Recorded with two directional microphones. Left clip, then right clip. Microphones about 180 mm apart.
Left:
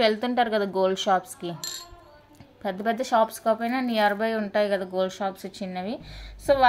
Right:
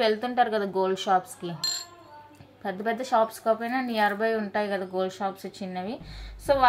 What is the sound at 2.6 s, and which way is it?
Speech, 40° left (ahead or behind).